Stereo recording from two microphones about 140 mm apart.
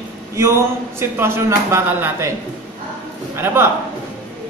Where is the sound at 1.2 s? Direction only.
20° right (ahead or behind).